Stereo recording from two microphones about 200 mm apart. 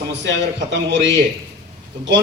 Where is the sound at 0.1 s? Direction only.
60° right (ahead or behind).